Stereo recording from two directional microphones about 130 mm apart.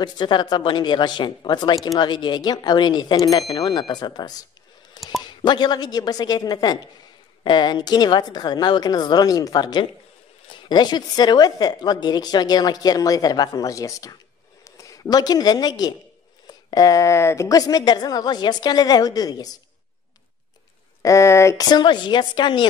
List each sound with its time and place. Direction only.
0.0 s a woman's voice: 35° left (ahead or behind)
21.0 s a woman's voice: 25° left (ahead or behind)